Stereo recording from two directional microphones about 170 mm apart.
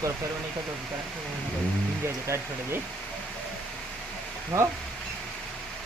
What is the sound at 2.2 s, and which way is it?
Speech, 15° right (ahead or behind).